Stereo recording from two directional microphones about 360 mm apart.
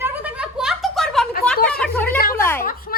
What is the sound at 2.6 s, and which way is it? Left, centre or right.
Speech, left.